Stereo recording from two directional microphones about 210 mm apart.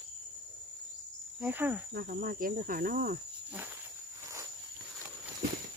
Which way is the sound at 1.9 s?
45° right (ahead or behind).